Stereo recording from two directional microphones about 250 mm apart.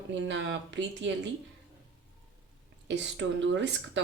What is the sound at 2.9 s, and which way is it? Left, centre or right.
Speech, right.